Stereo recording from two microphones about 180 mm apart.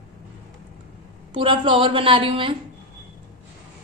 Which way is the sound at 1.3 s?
30° right (ahead or behind).